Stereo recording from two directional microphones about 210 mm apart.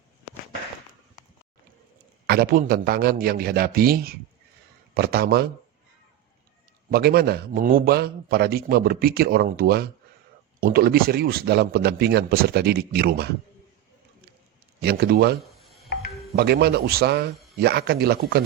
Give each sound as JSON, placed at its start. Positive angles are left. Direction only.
{"t": 2.2, "sound": "a man's voice", "side_deg": -45}
{"t": 6.9, "sound": "a man's voice", "side_deg": -50}
{"t": 14.8, "sound": "a man's voice", "side_deg": -50}